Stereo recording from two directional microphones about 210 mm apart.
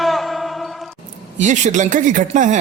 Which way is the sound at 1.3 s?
35° right (ahead or behind).